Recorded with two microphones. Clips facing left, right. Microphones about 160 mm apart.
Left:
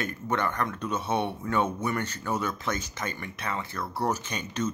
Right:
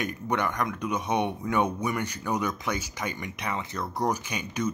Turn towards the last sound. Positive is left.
turn(degrees=-10)  # may be behind; listen again after turning